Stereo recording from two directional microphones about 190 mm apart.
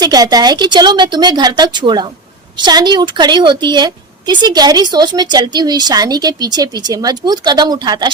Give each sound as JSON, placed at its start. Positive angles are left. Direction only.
{"t": 0.0, "sound": "a woman's voice", "side_deg": -20}